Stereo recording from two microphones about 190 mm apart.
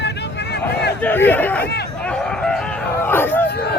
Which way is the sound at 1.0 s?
10° left (ahead or behind).